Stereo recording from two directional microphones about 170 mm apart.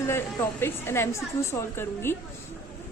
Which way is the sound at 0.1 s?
15° left (ahead or behind).